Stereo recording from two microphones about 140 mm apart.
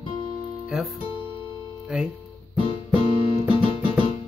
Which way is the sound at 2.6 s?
40° left (ahead or behind).